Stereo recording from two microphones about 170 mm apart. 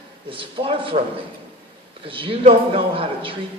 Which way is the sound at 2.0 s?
30° right (ahead or behind).